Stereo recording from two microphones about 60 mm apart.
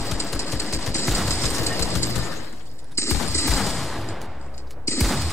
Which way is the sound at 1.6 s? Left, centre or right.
Left.